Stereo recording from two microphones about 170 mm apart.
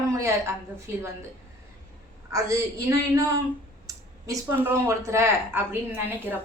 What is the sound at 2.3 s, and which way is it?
A woman's voice, 20° right (ahead or behind).